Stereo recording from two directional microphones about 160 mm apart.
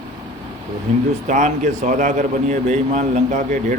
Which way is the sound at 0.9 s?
45° right (ahead or behind).